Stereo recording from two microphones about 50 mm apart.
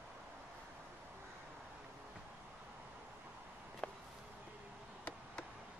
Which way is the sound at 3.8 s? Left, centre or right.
Left.